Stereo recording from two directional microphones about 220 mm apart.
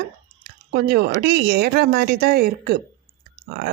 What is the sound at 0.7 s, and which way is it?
Speech, 45° right (ahead or behind).